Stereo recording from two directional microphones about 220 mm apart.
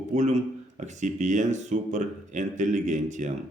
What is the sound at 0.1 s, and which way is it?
Speech, 30° right (ahead or behind).